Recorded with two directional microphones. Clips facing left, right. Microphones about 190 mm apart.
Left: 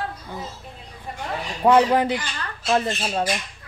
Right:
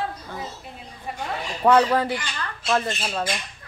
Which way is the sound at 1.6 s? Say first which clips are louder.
Left 2 dB; 15° left (ahead or behind).